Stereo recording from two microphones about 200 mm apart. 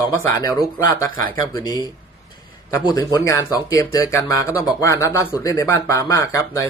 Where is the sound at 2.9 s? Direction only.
15° left (ahead or behind).